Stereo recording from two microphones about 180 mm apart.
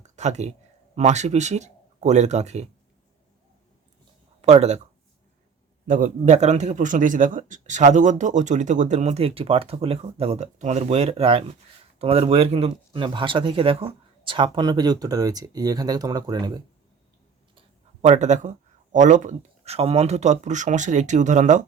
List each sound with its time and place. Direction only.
0.0 s a sound: 40° right (ahead or behind)
0.9 s a man's voice: 40° right (ahead or behind)
4.4 s speech: 35° right (ahead or behind)
5.9 s a man's voice: 45° right (ahead or behind); by 16.6 s 25° right (ahead or behind)
18.0 s a man's voice: 40° right (ahead or behind)